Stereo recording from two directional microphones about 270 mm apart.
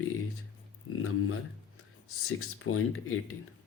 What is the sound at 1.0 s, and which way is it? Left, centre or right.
Speech, left.